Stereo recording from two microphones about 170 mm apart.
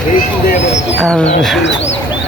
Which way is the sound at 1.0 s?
5° left (ahead or behind).